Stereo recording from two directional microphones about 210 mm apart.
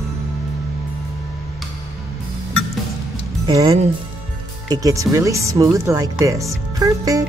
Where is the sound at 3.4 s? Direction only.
20° right (ahead or behind).